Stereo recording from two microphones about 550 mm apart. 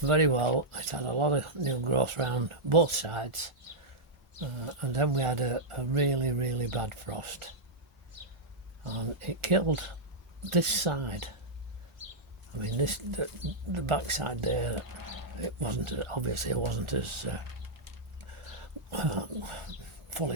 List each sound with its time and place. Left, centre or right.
0.0 s speech: right
8.8 s speech: right
12.5 s speech: right
18.9 s speech: right